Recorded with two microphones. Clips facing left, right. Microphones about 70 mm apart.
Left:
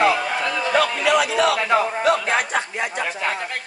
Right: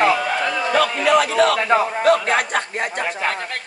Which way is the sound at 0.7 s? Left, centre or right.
Right.